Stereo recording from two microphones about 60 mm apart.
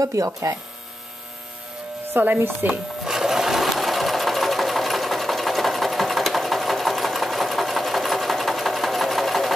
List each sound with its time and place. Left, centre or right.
0.0 s speech: right
2.1 s chopping: right
3.0 s sewing machine: centre